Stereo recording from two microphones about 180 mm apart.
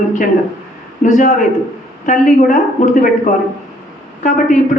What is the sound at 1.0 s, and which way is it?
Speech, 45° left (ahead or behind).